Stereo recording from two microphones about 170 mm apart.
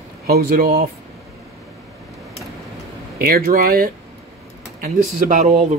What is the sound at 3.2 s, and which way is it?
Speech, 65° right (ahead or behind).